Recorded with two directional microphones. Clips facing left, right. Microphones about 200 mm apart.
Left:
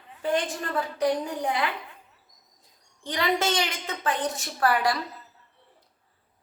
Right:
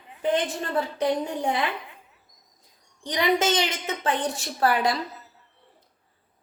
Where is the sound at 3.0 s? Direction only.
20° right (ahead or behind).